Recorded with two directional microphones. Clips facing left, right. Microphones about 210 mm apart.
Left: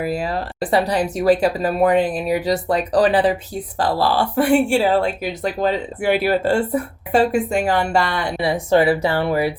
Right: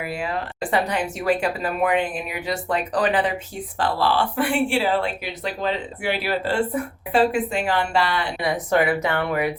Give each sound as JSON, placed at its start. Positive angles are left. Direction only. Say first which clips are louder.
{"t": 0.0, "sound": "speech", "louder": "left 5 dB", "side_deg": 40}
{"t": 8.4, "sound": "speech", "louder": "left 5 dB", "side_deg": 30}